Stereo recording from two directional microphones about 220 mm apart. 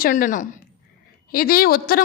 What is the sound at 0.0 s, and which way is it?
A woman's voice, 35° left (ahead or behind).